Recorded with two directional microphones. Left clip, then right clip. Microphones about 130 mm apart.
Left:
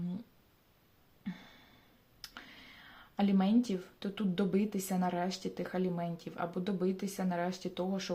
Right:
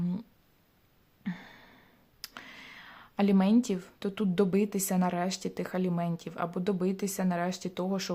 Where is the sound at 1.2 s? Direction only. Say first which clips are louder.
Right 6 dB; 50° right (ahead or behind).